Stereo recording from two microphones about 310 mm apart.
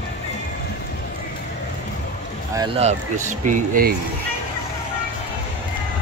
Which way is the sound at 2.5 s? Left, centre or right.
Centre.